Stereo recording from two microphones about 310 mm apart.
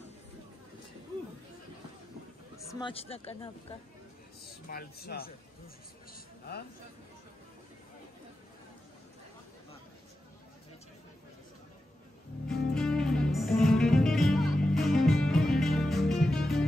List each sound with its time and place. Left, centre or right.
2.7 s speech: centre
4.6 s speech: left
12.4 s music: centre